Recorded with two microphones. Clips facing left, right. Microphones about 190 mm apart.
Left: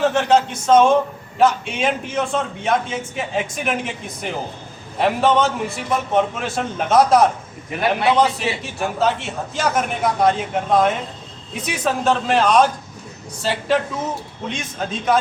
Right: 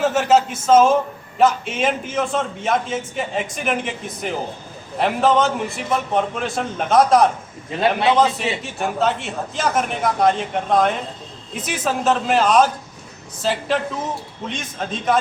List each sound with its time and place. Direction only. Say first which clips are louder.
0.0 s a man's voice: even; 5° right (ahead or behind)
7.7 s a man's voice: right 1 dB; 25° right (ahead or behind)
8.6 s a man's voice: left 1 dB; centre (ahead or behind)